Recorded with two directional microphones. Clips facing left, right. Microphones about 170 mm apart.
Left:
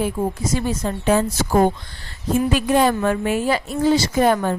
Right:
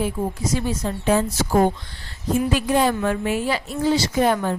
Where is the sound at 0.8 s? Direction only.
60° left (ahead or behind).